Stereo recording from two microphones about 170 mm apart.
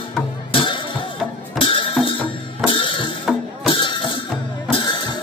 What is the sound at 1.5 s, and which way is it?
Music, 30° left (ahead or behind).